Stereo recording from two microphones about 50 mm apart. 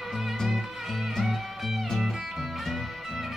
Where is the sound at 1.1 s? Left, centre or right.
Centre.